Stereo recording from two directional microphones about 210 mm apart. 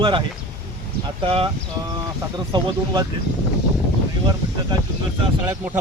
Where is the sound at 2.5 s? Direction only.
20° right (ahead or behind).